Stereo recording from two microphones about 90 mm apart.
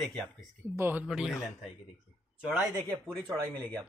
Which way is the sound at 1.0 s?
5° right (ahead or behind).